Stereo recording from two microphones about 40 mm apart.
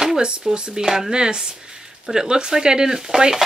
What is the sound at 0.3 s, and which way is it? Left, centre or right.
Speech, right.